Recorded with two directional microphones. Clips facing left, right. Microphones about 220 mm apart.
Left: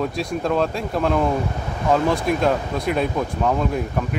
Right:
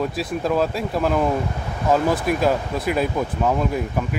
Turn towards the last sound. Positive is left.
turn(degrees=-5)  # may be behind; listen again after turning